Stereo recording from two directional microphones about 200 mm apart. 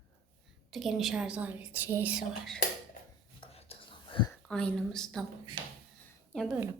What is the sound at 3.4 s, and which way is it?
Whispering, 30° left (ahead or behind).